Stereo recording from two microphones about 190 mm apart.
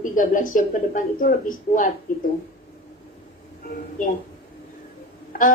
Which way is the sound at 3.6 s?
45° left (ahead or behind).